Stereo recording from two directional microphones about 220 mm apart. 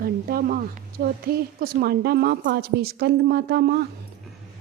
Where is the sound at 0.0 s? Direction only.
40° right (ahead or behind).